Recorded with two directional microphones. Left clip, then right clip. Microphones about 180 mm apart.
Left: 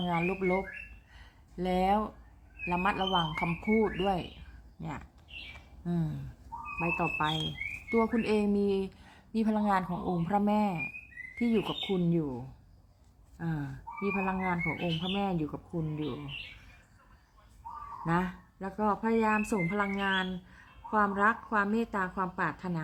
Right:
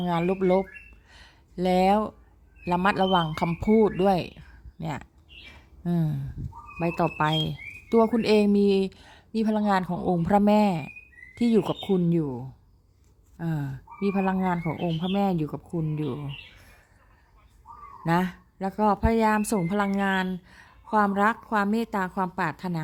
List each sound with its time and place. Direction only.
0.0 s a woman's voice: 50° right (ahead or behind)
1.1 s a sound: 50° right (ahead or behind)
2.6 s a woman's voice: 50° right (ahead or behind)
5.8 s a woman's voice: 45° right (ahead or behind)
6.7 s speech: 65° right (ahead or behind)
7.9 s a woman's voice: 50° right (ahead or behind)
10.2 s a woman's voice: 50° right (ahead or behind)
13.3 s speech: 55° right (ahead or behind)
16.0 s speech: 35° right (ahead or behind)
18.0 s speech: 55° right (ahead or behind)